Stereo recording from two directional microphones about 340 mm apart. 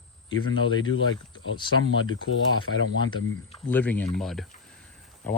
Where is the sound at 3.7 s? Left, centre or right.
Centre.